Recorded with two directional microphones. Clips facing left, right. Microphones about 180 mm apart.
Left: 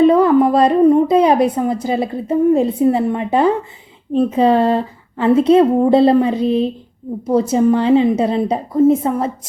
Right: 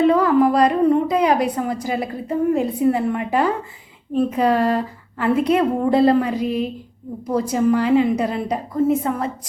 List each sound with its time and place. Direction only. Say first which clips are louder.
0.0 s a woman's voice: left 4 dB; 25° left (ahead or behind)